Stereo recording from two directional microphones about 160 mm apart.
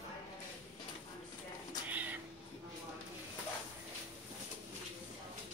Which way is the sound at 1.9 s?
10° right (ahead or behind).